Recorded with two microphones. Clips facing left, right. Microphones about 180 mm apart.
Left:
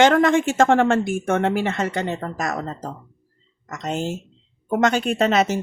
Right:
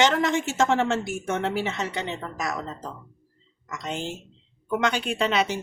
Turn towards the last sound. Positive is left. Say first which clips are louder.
# left 5 dB
turn(degrees=45)  # may be behind; listen again after turning